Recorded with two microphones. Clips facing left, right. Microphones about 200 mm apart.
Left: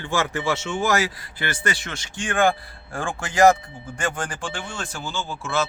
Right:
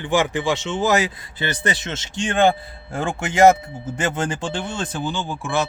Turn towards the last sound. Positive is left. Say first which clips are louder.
# right 2 dB
turn(degrees=-15)  # may be behind; listen again after turning